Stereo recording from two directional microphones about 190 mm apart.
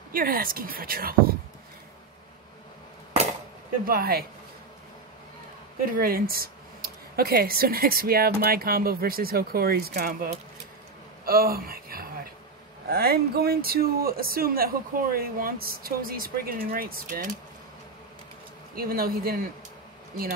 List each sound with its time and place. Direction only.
0.1 s speech: 50° right (ahead or behind)
3.8 s speech: 50° right (ahead or behind)
5.9 s speech: 50° right (ahead or behind)
18.8 s speech: 50° right (ahead or behind)